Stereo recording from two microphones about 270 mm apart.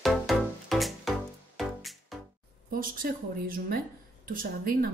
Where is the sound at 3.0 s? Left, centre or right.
Right.